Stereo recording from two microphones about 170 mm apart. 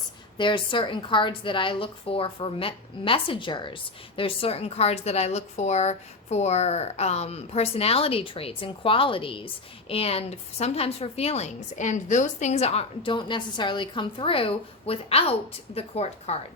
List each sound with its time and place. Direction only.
0.3 s a woman's voice: 30° left (ahead or behind)